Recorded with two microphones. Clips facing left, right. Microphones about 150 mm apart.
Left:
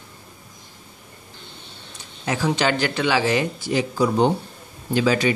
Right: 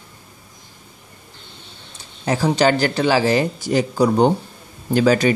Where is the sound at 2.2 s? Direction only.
35° right (ahead or behind).